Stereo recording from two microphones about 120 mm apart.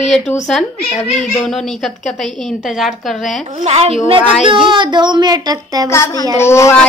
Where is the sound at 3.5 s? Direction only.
65° right (ahead or behind).